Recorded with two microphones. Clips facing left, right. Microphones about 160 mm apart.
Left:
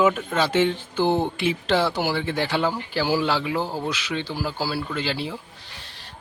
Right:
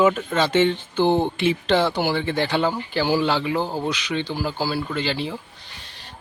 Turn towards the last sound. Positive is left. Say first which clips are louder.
# right 2 dB
turn(degrees=5)  # may be behind; listen again after turning